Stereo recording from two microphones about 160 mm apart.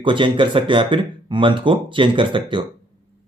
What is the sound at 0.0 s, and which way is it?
Speech, 30° right (ahead or behind).